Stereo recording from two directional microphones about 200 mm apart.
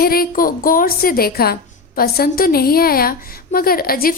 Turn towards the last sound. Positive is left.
turn(degrees=45)  # may be behind; listen again after turning